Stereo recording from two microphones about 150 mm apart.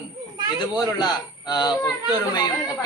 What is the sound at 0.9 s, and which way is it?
Speech, 25° left (ahead or behind).